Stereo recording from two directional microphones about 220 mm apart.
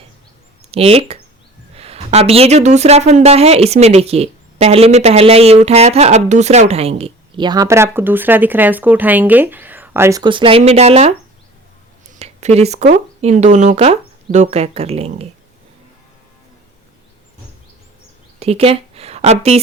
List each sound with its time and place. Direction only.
0.7 s a woman's voice: 25° right (ahead or behind)
12.2 s speech: 30° right (ahead or behind)
18.3 s a sound: 25° right (ahead or behind)